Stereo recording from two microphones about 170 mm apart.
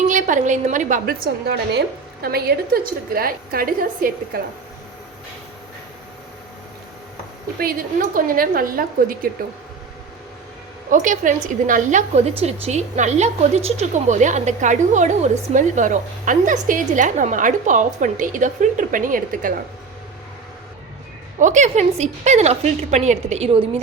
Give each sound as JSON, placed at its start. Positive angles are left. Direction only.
{"t": 0.1, "sound": "a woman's voice", "side_deg": -50}
{"t": 7.6, "sound": "a woman's voice", "side_deg": -55}
{"t": 10.9, "sound": "a woman's voice", "side_deg": -50}
{"t": 21.3, "sound": "a woman's voice", "side_deg": -45}